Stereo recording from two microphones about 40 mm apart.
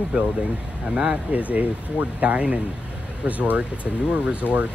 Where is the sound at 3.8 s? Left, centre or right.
Left.